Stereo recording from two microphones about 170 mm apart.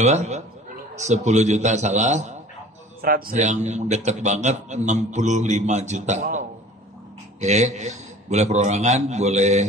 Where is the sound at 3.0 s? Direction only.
55° right (ahead or behind).